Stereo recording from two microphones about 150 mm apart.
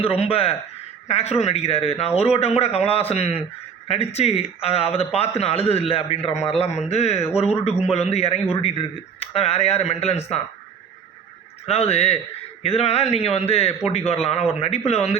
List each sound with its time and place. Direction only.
0.0 s a man's voice: 40° left (ahead or behind)
11.6 s speech: 45° left (ahead or behind)